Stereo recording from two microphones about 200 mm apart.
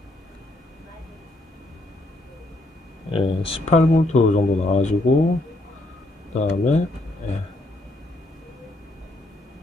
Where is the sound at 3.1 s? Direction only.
25° left (ahead or behind).